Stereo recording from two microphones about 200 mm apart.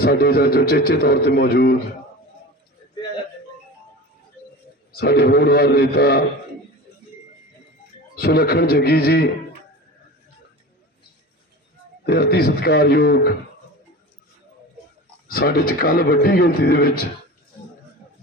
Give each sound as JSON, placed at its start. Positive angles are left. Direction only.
{"t": 0.0, "sound": "a man's voice", "side_deg": 50}
{"t": 4.9, "sound": "a man's voice", "side_deg": 50}
{"t": 8.1, "sound": "a man's voice", "side_deg": 50}
{"t": 12.0, "sound": "a man's voice", "side_deg": 50}
{"t": 15.3, "sound": "a man's voice", "side_deg": 50}